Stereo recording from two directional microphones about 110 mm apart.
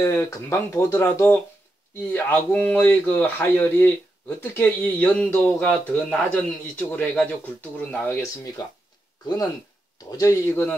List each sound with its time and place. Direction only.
0.0 s speech: 25° left (ahead or behind)
9.9 s speech: 30° left (ahead or behind)